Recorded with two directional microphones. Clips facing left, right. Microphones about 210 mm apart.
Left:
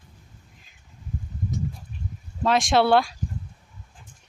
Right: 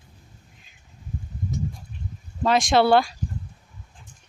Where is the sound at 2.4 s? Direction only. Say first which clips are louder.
Right 1 dB; centre (ahead or behind).